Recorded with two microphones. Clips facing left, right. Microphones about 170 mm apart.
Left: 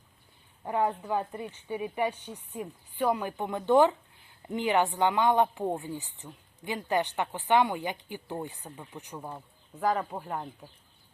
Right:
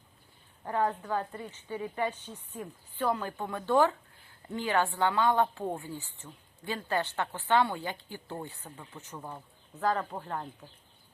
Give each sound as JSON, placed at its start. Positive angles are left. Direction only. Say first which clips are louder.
{"t": 0.6, "sound": "speech", "louder": "left 2 dB", "side_deg": 15}